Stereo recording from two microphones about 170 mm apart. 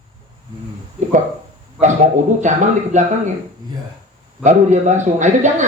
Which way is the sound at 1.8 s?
45° right (ahead or behind).